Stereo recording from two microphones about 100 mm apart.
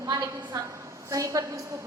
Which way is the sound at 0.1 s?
40° right (ahead or behind).